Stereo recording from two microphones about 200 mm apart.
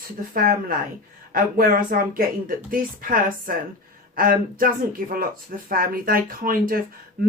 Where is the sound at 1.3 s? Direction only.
45° right (ahead or behind).